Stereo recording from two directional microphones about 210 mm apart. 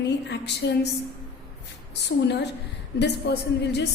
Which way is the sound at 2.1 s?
60° left (ahead or behind).